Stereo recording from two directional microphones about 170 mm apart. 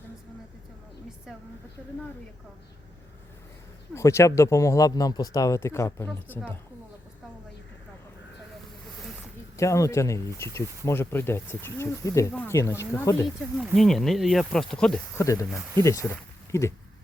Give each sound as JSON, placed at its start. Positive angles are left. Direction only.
{"t": 3.9, "sound": "speech", "side_deg": 15}
{"t": 9.6, "sound": "speech", "side_deg": 20}
{"t": 13.7, "sound": "speech", "side_deg": 0}
{"t": 15.2, "sound": "speech", "side_deg": 20}